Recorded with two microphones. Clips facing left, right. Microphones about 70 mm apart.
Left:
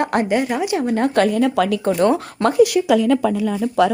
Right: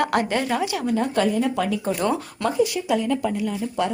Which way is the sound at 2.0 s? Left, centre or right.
Left.